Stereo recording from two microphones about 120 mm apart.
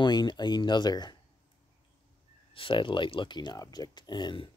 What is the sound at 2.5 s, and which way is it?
Speech, 45° left (ahead or behind).